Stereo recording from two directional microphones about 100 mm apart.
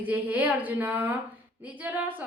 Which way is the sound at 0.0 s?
15° right (ahead or behind).